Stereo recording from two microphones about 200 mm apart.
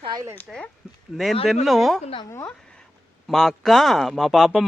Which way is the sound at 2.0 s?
30° left (ahead or behind).